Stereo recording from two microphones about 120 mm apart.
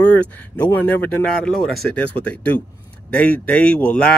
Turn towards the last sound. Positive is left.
turn(degrees=10)  # may be behind; listen again after turning